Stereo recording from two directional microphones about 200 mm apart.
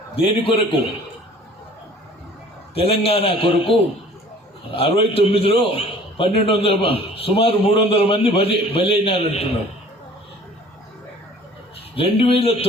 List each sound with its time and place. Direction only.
0.2 s a man's voice: 25° left (ahead or behind)
2.7 s a man's voice: 30° left (ahead or behind)
11.9 s a man's voice: 30° left (ahead or behind)